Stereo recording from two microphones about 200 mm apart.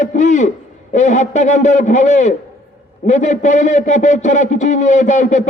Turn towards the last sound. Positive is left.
turn(degrees=40)  # may be behind; listen again after turning